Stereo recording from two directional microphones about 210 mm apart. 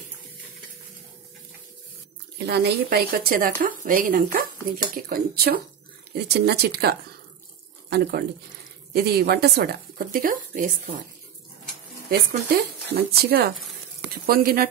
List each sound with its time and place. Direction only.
2.3 s speech: 50° right (ahead or behind)
12.1 s speech: 50° right (ahead or behind)